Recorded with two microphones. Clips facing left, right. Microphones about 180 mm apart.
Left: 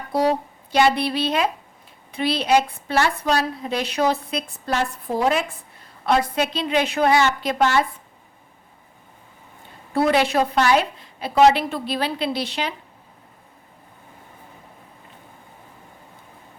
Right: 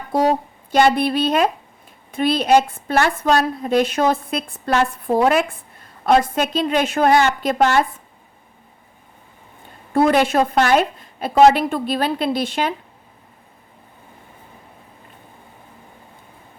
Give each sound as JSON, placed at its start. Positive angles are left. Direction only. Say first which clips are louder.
{"t": 0.1, "sound": "a woman's voice", "louder": "right 2 dB", "side_deg": -50}
{"t": 9.9, "sound": "a woman's voice", "louder": "right 3 dB", "side_deg": -50}